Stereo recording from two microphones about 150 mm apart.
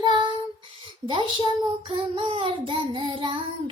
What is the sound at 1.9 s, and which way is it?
Child singing, 40° right (ahead or behind).